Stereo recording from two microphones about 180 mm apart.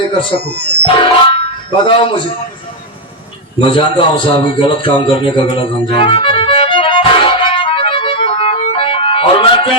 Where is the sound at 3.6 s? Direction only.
30° left (ahead or behind).